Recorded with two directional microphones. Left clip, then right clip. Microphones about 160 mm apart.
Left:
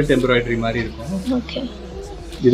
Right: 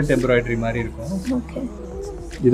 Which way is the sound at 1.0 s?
Centre (ahead or behind).